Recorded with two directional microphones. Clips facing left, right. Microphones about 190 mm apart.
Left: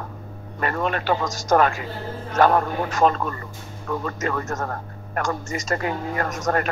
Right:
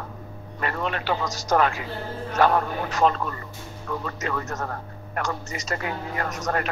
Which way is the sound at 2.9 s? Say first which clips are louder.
Left 2 dB; 50° left (ahead or behind).